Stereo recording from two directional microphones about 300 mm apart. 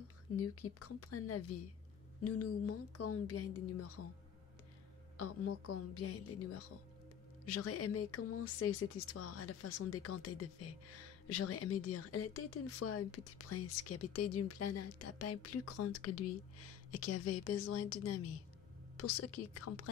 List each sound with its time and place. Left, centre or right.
0.4 s speech: left
5.2 s speech: left